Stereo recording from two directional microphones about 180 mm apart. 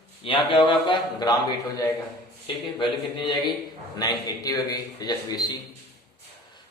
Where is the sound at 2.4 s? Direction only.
25° left (ahead or behind).